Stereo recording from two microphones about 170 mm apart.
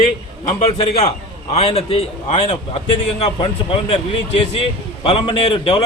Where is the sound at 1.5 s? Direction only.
35° left (ahead or behind).